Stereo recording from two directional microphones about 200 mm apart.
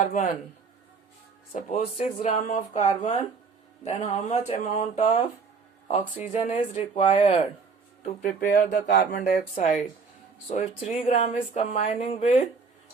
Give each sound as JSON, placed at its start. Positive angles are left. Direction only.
{"t": 0.0, "sound": "speech", "side_deg": 40}
{"t": 1.5, "sound": "speech", "side_deg": 40}
{"t": 8.0, "sound": "speech", "side_deg": 40}
{"t": 8.4, "sound": "speech", "side_deg": 55}
{"t": 11.0, "sound": "speech", "side_deg": 30}